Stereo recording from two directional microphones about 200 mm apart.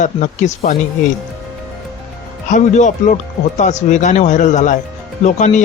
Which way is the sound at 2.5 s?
35° left (ahead or behind).